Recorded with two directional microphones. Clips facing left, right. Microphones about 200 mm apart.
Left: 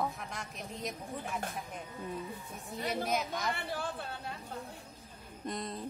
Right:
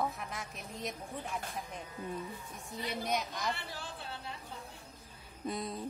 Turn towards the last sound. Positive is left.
turn(degrees=0)  # may be behind; listen again after turning